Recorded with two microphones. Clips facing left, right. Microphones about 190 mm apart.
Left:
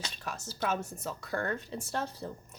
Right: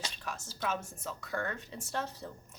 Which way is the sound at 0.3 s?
40° left (ahead or behind).